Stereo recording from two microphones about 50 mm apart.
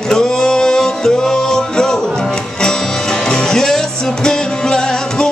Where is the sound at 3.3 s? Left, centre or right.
Centre.